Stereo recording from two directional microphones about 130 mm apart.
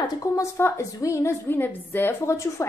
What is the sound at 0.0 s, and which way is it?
A woman's voice, 25° left (ahead or behind).